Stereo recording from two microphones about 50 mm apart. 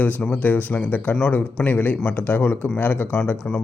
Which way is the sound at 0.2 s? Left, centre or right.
Left.